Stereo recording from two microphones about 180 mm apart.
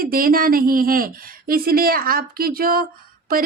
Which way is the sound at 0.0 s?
55° right (ahead or behind).